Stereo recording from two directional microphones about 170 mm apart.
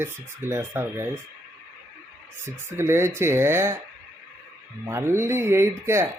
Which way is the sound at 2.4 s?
15° right (ahead or behind).